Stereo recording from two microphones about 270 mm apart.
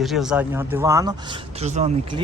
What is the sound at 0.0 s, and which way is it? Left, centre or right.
Speech, centre.